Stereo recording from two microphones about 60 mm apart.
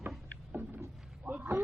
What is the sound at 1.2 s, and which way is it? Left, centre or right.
Speech, right.